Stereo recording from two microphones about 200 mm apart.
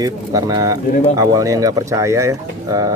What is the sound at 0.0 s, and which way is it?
Speech, 20° right (ahead or behind).